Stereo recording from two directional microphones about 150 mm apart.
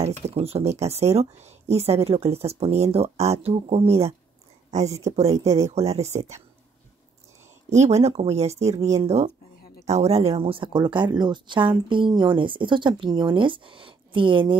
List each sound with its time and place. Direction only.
0.4 s speech: 45° right (ahead or behind)
7.7 s speech: 50° right (ahead or behind)